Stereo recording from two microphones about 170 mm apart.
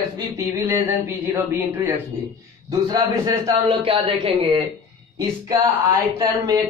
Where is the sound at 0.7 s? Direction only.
15° right (ahead or behind).